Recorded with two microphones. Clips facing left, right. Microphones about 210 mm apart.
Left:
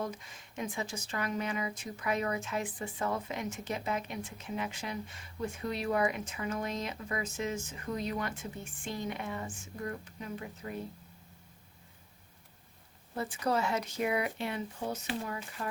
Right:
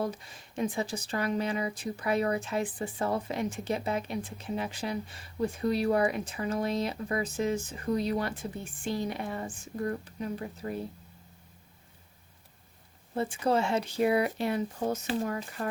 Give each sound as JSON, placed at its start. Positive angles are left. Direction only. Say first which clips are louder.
{"t": 0.0, "sound": "speech", "louder": "right 5 dB", "side_deg": -35}
{"t": 13.1, "sound": "speech", "louder": "right 4 dB", "side_deg": -25}